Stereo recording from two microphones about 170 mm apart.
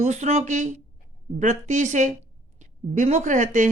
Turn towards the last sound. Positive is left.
turn(degrees=-45)  # may be behind; listen again after turning